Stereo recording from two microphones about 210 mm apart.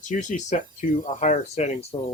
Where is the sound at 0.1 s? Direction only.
35° left (ahead or behind).